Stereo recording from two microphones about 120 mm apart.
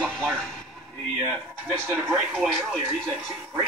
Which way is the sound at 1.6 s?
15° right (ahead or behind).